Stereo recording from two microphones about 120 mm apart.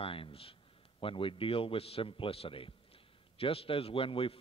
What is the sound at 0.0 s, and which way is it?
A man's voice, 50° left (ahead or behind).